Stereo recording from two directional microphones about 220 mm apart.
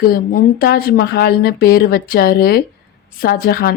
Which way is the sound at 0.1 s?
45° left (ahead or behind).